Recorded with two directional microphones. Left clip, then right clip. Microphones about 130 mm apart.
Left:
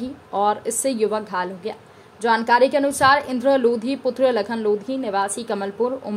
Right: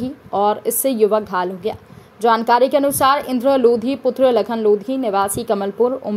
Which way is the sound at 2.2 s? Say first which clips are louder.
Right 3 dB; 35° right (ahead or behind).